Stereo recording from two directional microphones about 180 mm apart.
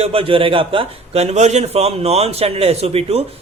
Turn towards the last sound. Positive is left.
turn(degrees=-35)  # may be behind; listen again after turning